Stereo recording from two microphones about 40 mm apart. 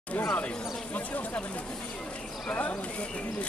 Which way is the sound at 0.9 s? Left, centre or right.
Left.